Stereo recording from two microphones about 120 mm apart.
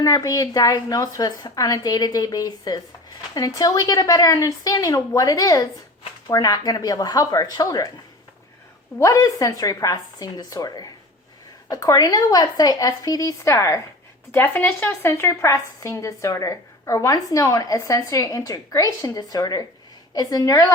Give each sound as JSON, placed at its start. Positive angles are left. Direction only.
{"t": 0.0, "sound": "a woman's voice", "side_deg": 30}
{"t": 9.0, "sound": "a woman's voice", "side_deg": 25}